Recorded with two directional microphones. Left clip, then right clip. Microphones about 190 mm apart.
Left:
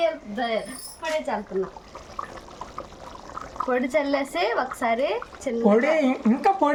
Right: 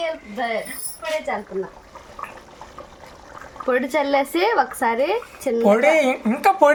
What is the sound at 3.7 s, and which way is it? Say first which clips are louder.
Speech: right 4 dB; 35° right (ahead or behind).